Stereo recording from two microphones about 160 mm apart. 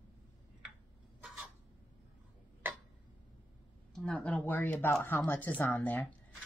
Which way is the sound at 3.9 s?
5° left (ahead or behind).